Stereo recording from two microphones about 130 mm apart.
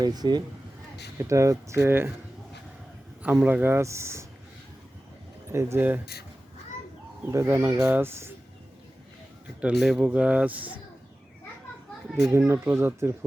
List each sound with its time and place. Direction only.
0.0 s speech: 30° right (ahead or behind)
3.2 s speech: 10° right (ahead or behind)
5.5 s speech: 20° right (ahead or behind)
7.3 s speech: 20° right (ahead or behind)
9.6 s speech: 5° right (ahead or behind)
12.2 s speech: 20° right (ahead or behind)